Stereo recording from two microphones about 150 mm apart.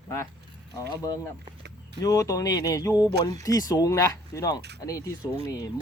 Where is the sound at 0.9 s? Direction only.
25° left (ahead or behind).